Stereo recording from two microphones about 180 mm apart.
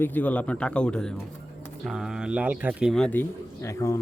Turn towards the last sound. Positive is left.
turn(degrees=20)  # may be behind; listen again after turning